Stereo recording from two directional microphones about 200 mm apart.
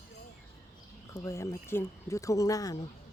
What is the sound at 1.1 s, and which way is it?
Speech, 15° left (ahead or behind).